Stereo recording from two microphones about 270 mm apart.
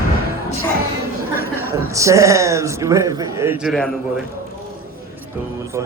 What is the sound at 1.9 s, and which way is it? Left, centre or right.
A man's voice, centre.